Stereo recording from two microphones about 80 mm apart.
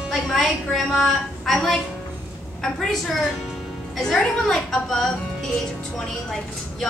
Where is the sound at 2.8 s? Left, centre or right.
Centre.